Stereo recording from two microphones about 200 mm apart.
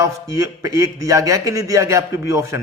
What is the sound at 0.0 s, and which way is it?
A man's voice, 15° right (ahead or behind).